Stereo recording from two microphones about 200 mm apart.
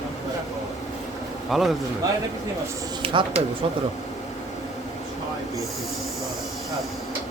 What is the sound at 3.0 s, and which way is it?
Speech, 25° right (ahead or behind).